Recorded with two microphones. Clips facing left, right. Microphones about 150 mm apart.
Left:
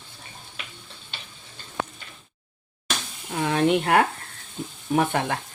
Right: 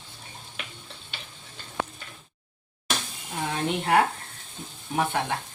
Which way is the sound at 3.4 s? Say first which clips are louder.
Left 7 dB; 80° left.